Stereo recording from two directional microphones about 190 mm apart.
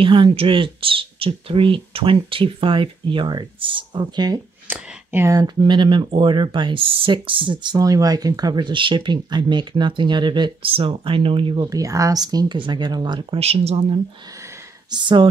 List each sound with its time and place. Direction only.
0.0 s speech: 25° right (ahead or behind)
4.6 s speech: 10° right (ahead or behind)